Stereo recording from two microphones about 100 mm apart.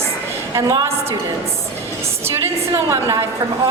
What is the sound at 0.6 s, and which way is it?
Speech, 30° right (ahead or behind).